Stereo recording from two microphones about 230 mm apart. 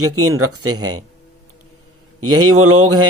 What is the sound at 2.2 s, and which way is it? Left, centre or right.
Speech, right.